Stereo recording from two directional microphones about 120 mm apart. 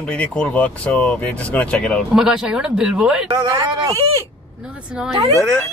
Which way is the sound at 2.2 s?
5° right (ahead or behind).